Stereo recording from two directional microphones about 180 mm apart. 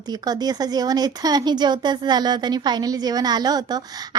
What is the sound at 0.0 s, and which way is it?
Speech, 20° right (ahead or behind).